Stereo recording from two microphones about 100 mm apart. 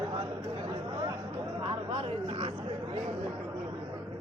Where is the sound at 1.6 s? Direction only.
75° right (ahead or behind).